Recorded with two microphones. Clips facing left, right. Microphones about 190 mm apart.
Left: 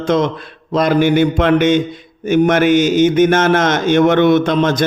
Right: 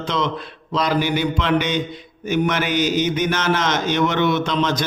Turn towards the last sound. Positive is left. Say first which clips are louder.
# left 7 dB
turn(degrees=50)  # may be behind; listen again after turning